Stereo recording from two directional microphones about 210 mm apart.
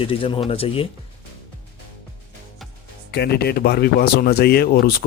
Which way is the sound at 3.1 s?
50° left (ahead or behind).